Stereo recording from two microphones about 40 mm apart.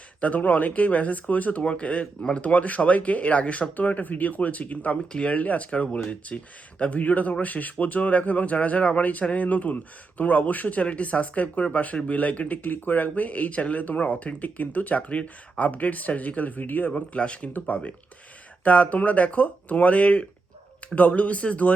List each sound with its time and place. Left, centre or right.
0.2 s speech: left
1.6 s speech: left
12.7 s speech: left
16.9 s speech: left